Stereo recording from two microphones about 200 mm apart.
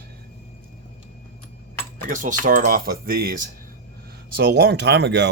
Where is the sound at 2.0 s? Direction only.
40° right (ahead or behind).